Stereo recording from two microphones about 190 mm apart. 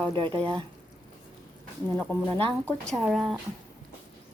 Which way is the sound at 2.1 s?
25° right (ahead or behind).